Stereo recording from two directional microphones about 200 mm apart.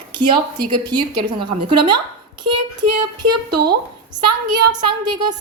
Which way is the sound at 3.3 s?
20° right (ahead or behind).